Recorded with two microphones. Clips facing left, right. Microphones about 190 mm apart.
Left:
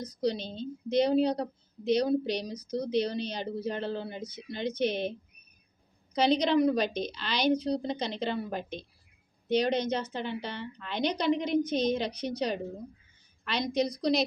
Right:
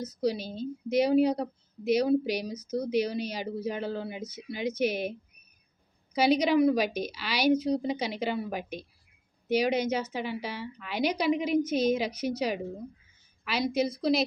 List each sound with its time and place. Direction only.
0.2 s a woman's voice: 5° right (ahead or behind)
6.1 s a woman's voice: 10° right (ahead or behind)